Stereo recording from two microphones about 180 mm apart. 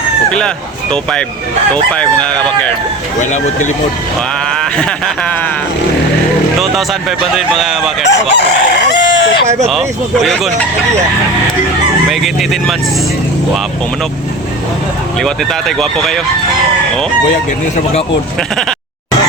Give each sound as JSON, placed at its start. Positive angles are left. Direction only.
{"t": 0.3, "sound": "speech", "side_deg": 5}
{"t": 1.7, "sound": "speech", "side_deg": 5}
{"t": 3.2, "sound": "speech", "side_deg": 45}
{"t": 7.3, "sound": "speech", "side_deg": 0}
{"t": 8.0, "sound": "chicken", "side_deg": 75}
{"t": 12.2, "sound": "speech", "side_deg": 0}
{"t": 15.2, "sound": "speech", "side_deg": 0}